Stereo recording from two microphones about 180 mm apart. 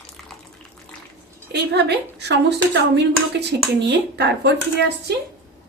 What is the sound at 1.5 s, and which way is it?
A woman's voice, 70° right (ahead or behind).